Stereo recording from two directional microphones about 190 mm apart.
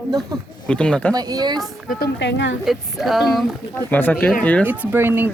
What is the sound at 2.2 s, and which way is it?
Speech, 70° left (ahead or behind).